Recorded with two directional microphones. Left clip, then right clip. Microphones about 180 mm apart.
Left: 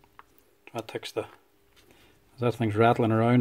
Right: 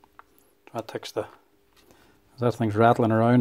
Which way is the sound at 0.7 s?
20° right (ahead or behind).